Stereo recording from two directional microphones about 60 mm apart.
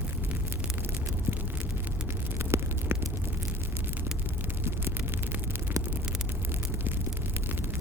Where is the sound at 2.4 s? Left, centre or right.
Right.